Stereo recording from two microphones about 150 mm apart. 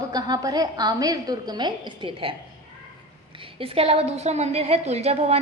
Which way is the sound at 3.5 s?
40° right (ahead or behind).